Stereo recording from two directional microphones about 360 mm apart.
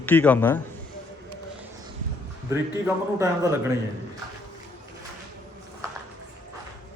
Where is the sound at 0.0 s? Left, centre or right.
Centre.